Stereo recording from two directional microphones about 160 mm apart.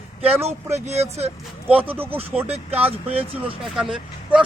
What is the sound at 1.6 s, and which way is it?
Speech, 10° right (ahead or behind).